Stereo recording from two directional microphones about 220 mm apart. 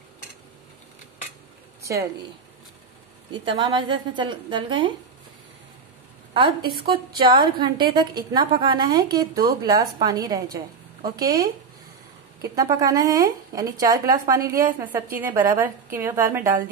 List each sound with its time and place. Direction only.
1.8 s a sound: 15° right (ahead or behind)
3.4 s a woman's voice: 20° right (ahead or behind)
6.3 s a woman's voice: 20° right (ahead or behind)